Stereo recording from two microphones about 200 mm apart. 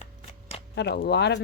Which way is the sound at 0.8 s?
55° left (ahead or behind).